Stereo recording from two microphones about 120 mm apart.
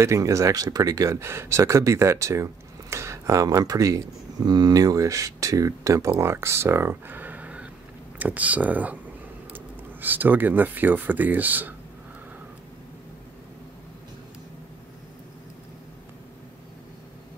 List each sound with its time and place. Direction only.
0.0 s speech: 25° right (ahead or behind)